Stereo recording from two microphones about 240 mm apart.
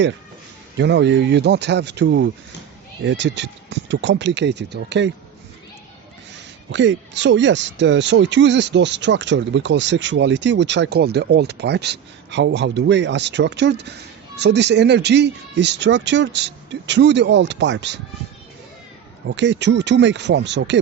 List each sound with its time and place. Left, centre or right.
0.8 s speech: right
6.7 s speech: right
19.3 s speech: right